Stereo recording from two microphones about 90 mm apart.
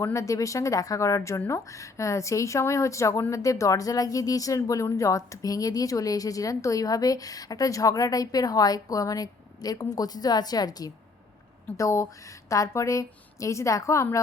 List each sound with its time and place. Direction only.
0.0 s a woman's voice: 35° left (ahead or behind)
11.8 s a woman's voice: 35° left (ahead or behind)